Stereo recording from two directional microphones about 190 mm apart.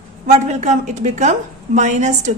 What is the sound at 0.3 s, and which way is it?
A woman's voice, 35° right (ahead or behind).